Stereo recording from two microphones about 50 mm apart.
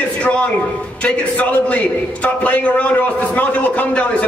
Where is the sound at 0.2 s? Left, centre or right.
Left.